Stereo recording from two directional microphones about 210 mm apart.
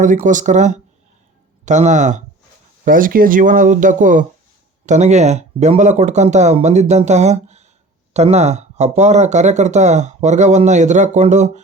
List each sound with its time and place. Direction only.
0.0 s speech: 40° right (ahead or behind)